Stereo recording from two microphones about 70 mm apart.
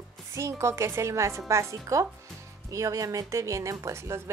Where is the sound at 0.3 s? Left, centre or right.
Right.